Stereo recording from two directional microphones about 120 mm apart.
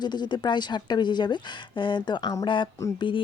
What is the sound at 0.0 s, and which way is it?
Speech, 35° left (ahead or behind).